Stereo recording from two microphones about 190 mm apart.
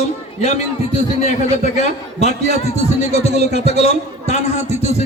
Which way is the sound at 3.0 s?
35° left (ahead or behind).